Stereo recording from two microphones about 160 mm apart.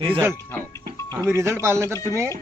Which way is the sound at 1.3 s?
15° right (ahead or behind).